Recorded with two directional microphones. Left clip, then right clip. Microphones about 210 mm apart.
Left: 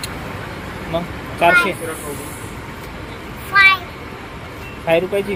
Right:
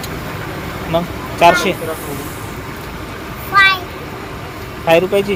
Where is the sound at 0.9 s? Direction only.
10° right (ahead or behind).